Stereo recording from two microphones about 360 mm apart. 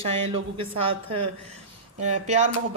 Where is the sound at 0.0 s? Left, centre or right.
Centre.